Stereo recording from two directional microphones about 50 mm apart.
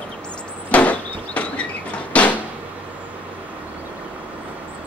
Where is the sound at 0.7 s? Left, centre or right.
Left.